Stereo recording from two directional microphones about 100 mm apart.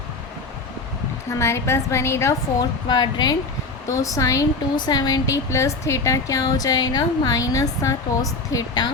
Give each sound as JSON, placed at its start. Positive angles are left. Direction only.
{"t": 1.4, "sound": "a woman's voice", "side_deg": 25}
{"t": 2.6, "sound": "speech", "side_deg": 45}
{"t": 3.8, "sound": "a woman's voice", "side_deg": 35}